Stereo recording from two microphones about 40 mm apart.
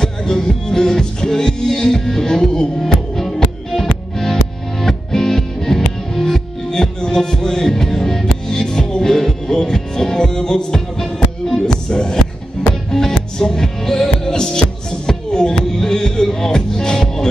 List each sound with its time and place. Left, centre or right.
0.0 s music: centre
2.8 s music: centre